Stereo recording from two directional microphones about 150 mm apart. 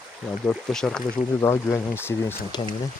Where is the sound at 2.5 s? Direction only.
30° left (ahead or behind).